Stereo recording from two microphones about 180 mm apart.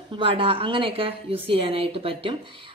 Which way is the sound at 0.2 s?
30° right (ahead or behind).